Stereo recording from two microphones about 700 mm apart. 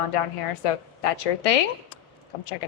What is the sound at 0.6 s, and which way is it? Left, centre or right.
A woman's voice, left.